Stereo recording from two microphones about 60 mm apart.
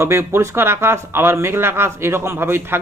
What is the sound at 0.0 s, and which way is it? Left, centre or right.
Speech, right.